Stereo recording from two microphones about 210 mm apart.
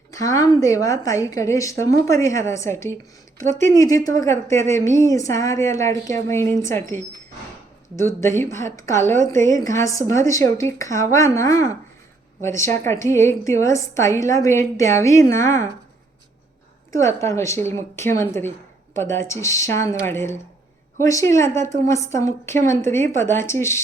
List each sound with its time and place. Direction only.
0.1 s a woman's voice: 15° left (ahead or behind)
8.4 s a woman's voice: 10° left (ahead or behind)
16.9 s a woman's voice: 15° left (ahead or behind)